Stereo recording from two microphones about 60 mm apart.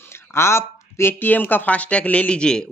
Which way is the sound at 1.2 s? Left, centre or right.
Left.